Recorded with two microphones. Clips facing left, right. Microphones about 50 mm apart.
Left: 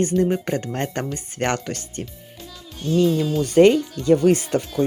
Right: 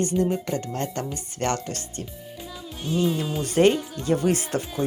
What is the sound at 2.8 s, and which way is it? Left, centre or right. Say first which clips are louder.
Music: left 6 dB; centre.